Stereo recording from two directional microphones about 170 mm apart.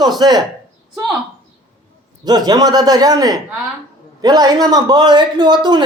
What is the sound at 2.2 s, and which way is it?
Speech, 25° right (ahead or behind).